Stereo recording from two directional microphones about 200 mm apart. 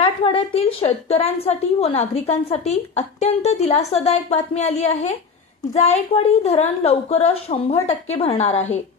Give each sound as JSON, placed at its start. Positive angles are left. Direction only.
{"t": 0.0, "sound": "a woman's voice", "side_deg": 25}